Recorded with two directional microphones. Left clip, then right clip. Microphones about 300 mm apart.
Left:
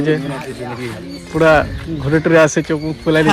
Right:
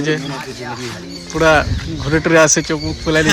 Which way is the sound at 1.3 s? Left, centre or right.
Centre.